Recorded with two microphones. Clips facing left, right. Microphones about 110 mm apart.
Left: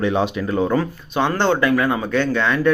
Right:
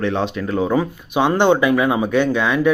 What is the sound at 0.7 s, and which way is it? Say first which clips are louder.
Speech: right 2 dB; 15° right (ahead or behind).